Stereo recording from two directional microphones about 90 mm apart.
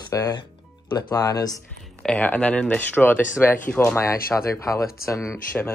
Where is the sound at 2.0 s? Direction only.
15° left (ahead or behind).